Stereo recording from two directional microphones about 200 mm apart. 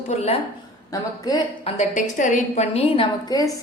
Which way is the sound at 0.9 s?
20° left (ahead or behind).